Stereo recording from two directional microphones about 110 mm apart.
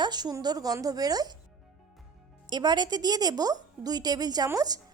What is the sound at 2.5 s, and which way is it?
A woman's voice, 40° right (ahead or behind).